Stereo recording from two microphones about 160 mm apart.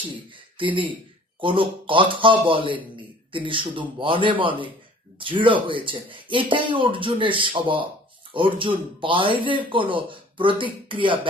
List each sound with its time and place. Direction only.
0.5 s speech: 30° right (ahead or behind)